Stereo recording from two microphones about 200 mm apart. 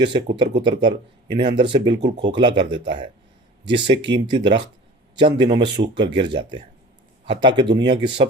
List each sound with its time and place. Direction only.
0.0 s speech: 25° right (ahead or behind)